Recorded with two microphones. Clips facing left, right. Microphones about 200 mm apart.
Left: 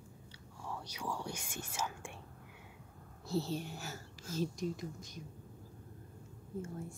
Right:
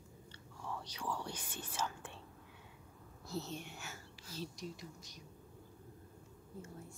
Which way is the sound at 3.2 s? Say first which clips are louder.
Left 7 dB; 30° left (ahead or behind).